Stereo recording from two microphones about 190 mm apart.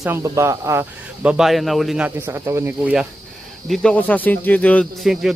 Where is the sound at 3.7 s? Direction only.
5° left (ahead or behind).